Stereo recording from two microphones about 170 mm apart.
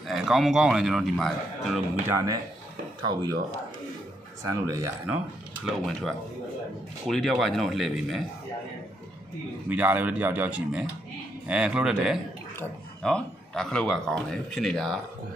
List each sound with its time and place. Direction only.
0.0 s speech: centre (ahead or behind)
2.0 s speech: 20° right (ahead or behind)
4.4 s speech: 20° right (ahead or behind)
5.7 s speech: centre (ahead or behind)
9.7 s speech: 10° right (ahead or behind)